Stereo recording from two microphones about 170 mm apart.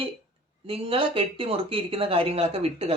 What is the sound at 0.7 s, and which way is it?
Speech, 35° right (ahead or behind).